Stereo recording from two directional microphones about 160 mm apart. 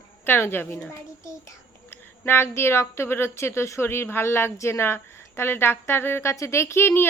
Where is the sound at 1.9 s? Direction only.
15° left (ahead or behind).